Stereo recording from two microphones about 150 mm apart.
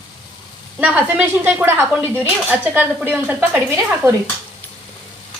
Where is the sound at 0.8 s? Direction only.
10° right (ahead or behind).